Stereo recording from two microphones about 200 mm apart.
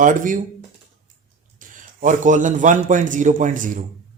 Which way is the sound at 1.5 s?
40° right (ahead or behind).